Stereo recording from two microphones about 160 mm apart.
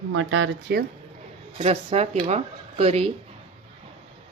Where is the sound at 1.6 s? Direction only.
40° right (ahead or behind).